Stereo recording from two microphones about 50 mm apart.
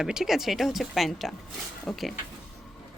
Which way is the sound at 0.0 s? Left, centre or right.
Centre.